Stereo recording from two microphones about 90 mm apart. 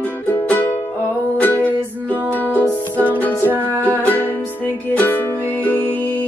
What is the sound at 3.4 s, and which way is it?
Music, 25° right (ahead or behind).